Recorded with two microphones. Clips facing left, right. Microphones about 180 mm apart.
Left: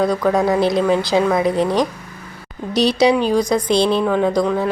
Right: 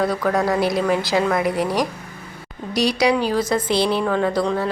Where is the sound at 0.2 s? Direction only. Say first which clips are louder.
Left 3 dB; centre (ahead or behind).